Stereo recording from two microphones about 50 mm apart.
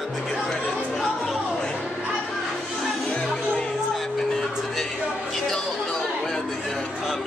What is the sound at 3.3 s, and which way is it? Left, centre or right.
Music, centre.